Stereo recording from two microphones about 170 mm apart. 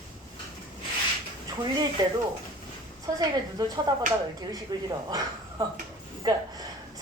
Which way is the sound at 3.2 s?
25° right (ahead or behind).